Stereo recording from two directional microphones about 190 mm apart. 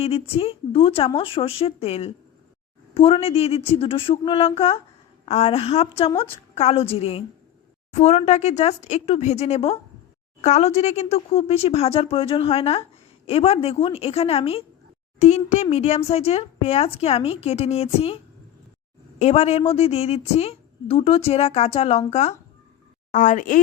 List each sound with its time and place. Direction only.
0.0 s a woman's voice: 30° left (ahead or behind)
19.2 s a woman's voice: 35° left (ahead or behind)